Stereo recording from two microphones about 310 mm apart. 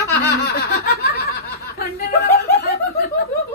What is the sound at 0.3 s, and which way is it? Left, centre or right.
Laughter, left.